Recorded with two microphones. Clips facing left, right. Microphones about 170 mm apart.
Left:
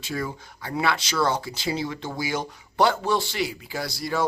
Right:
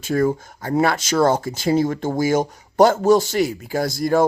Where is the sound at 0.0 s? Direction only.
50° right (ahead or behind).